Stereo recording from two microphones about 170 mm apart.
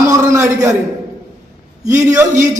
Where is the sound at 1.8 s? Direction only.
20° right (ahead or behind).